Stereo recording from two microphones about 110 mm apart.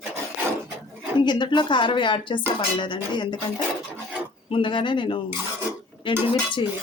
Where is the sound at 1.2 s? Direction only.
45° left (ahead or behind).